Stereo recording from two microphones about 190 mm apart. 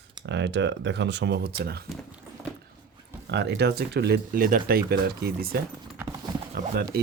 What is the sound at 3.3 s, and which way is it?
Speech, 65° right (ahead or behind).